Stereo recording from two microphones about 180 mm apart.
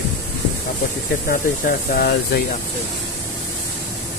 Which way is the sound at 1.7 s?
60° left (ahead or behind).